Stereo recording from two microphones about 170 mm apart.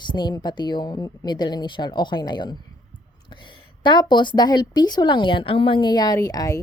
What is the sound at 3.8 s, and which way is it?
Speech, 25° left (ahead or behind).